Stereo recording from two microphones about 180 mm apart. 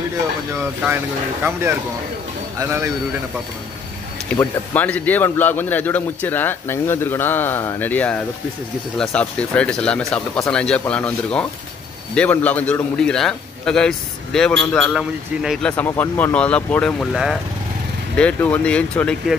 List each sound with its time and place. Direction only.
0.6 s speech: 15° right (ahead or behind)
4.4 s a man's voice: 10° left (ahead or behind)